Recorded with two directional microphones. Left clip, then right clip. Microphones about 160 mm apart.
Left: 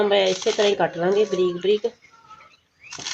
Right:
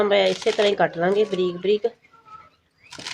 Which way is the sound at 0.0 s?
25° left (ahead or behind).